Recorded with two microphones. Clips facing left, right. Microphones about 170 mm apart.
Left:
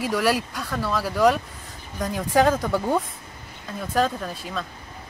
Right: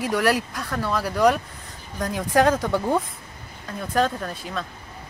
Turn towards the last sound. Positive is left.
turn(degrees=0)  # may be behind; listen again after turning